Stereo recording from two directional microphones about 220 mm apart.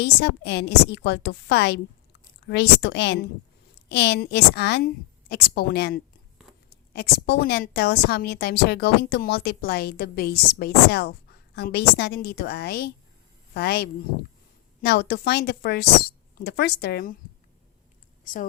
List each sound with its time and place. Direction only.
0.0 s a woman's voice: 50° left (ahead or behind)